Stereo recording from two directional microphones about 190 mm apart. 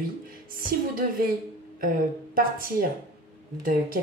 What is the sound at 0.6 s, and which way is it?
Speech, 50° right (ahead or behind).